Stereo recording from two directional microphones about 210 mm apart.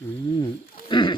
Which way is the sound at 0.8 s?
20° left (ahead or behind).